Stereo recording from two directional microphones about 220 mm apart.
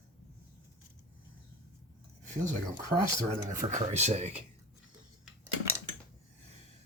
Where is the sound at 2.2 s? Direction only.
35° right (ahead or behind).